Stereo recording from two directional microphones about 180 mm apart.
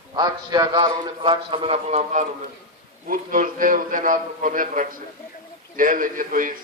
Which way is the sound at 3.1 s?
50° right (ahead or behind).